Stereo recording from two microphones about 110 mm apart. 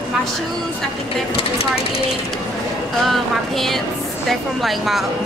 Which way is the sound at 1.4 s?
65° left (ahead or behind).